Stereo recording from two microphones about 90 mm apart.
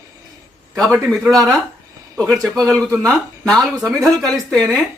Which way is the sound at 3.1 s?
5° left (ahead or behind).